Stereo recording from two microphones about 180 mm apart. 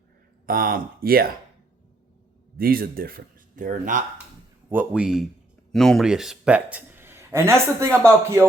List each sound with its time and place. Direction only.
0.4 s speech: 55° right (ahead or behind)
2.6 s speech: 55° right (ahead or behind)
4.7 s a man's voice: 5° right (ahead or behind)